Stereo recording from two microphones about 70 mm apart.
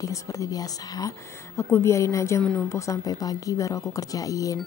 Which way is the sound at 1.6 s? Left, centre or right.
Left.